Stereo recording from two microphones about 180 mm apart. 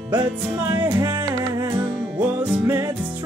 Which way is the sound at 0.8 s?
20° right (ahead or behind).